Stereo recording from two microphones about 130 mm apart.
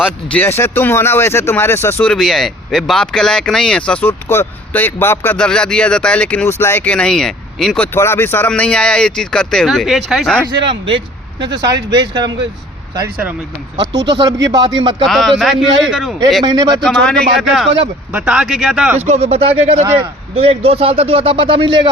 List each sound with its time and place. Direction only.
0.3 s speech: 15° left (ahead or behind)
2.0 s speech: 5° left (ahead or behind)
7.9 s speech: 20° left (ahead or behind); by 10.3 s 5° right (ahead or behind)
10.6 s speech: 40° right (ahead or behind)
14.2 s speech: 25° right (ahead or behind)
15.0 s a man's voice: centre (ahead or behind)
16.4 s speech: 30° right (ahead or behind)
16.8 s a man's voice: 5° left (ahead or behind)
18.9 s a man's voice: 55° right (ahead or behind); by 21.8 s 40° right (ahead or behind)